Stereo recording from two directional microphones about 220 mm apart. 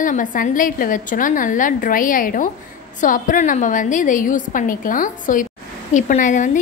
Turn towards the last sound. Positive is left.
turn(degrees=35)  # may be behind; listen again after turning